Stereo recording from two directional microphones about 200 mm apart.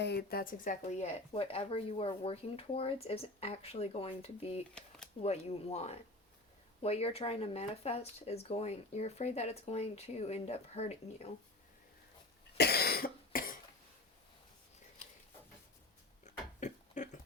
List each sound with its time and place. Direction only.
0.0 s speech: 55° left (ahead or behind); by 11.3 s 30° left (ahead or behind)
12.5 s cough: 55° left (ahead or behind)
16.2 s a sound: 35° left (ahead or behind)